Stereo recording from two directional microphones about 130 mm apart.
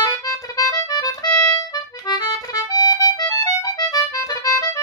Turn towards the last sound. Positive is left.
turn(degrees=25)  # may be behind; listen again after turning